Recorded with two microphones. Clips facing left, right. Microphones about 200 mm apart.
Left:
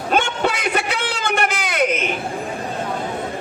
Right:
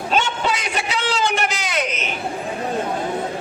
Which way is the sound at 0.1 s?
55° left (ahead or behind).